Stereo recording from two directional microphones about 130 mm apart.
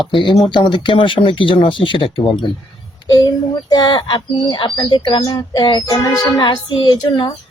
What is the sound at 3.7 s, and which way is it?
Speech, 35° left (ahead or behind).